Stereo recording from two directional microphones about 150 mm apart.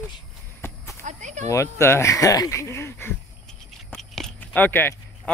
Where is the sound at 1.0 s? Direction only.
50° right (ahead or behind).